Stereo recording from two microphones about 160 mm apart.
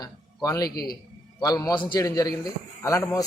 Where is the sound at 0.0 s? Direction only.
20° left (ahead or behind).